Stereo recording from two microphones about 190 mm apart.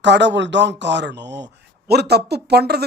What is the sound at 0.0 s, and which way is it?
Speech, 65° right (ahead or behind).